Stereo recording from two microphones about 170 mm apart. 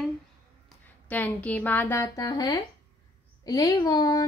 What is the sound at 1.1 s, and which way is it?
Speech, 10° left (ahead or behind).